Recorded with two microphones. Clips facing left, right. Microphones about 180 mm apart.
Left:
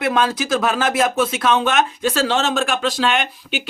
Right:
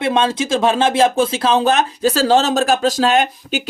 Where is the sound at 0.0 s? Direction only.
25° right (ahead or behind).